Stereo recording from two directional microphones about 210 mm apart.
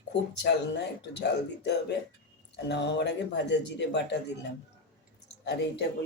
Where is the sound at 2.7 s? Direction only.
55° left (ahead or behind).